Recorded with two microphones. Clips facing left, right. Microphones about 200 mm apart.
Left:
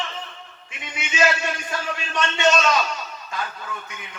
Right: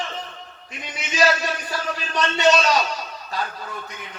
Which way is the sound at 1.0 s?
35° right (ahead or behind).